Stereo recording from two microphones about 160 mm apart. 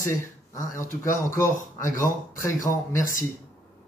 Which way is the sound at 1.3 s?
15° left (ahead or behind).